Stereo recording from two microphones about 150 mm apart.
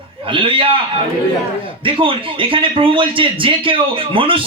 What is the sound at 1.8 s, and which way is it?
Speech, 35° right (ahead or behind).